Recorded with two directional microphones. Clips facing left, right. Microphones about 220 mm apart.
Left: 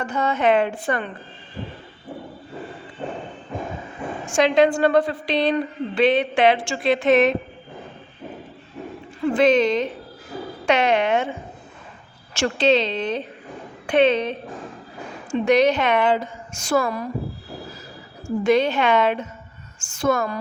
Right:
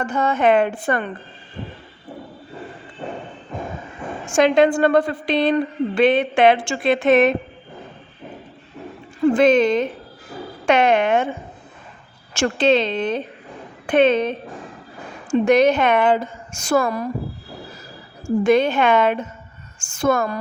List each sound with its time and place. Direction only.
0.0 s a woman's voice: 50° right (ahead or behind)
4.4 s a woman's voice: 50° right (ahead or behind)
9.2 s a woman's voice: 45° right (ahead or behind)
12.3 s a woman's voice: 50° right (ahead or behind)
18.4 s a woman's voice: 50° right (ahead or behind)